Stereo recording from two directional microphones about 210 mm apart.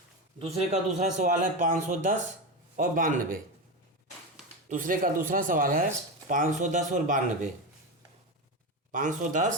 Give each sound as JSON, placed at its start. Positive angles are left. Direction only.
{"t": 0.3, "sound": "speech", "side_deg": -30}
{"t": 4.7, "sound": "speech", "side_deg": -40}
{"t": 8.9, "sound": "speech", "side_deg": -40}